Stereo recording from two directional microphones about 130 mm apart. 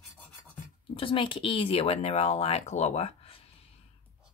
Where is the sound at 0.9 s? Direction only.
45° left (ahead or behind).